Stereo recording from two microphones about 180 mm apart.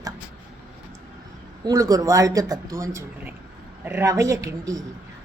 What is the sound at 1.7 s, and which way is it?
A woman's voice, 20° right (ahead or behind).